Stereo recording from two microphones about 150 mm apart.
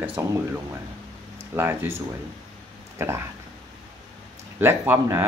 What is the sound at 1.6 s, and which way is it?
Speech, 15° right (ahead or behind).